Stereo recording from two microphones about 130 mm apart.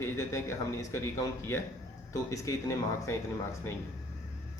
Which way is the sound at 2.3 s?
25° left (ahead or behind).